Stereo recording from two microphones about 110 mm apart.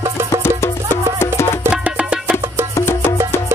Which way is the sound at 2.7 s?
20° left (ahead or behind).